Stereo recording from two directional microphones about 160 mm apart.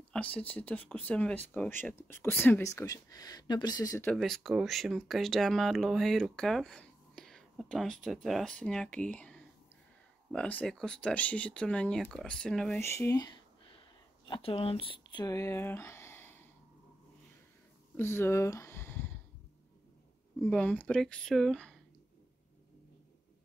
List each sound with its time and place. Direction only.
0.1 s speech: 10° left (ahead or behind); by 4.0 s 25° left (ahead or behind)
4.0 s speech: 5° left (ahead or behind)
12.8 s a sound: 15° left (ahead or behind)
14.2 s speech: 35° left (ahead or behind); by 16.4 s 15° left (ahead or behind)
17.9 s a sound: 15° left (ahead or behind)
20.3 s speech: 10° left (ahead or behind)